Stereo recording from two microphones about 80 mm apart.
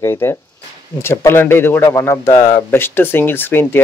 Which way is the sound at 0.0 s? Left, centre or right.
Left.